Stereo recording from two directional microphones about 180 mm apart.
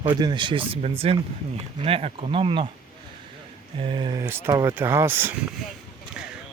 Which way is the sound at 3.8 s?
30° right (ahead or behind).